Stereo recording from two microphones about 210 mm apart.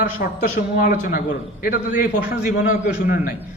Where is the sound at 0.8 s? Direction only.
40° left (ahead or behind).